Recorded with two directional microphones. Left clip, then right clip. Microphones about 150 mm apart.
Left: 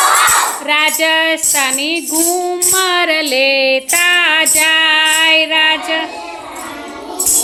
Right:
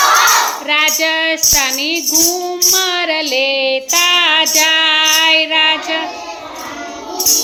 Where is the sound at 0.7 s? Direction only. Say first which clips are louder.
Left 2 dB; 25° left (ahead or behind).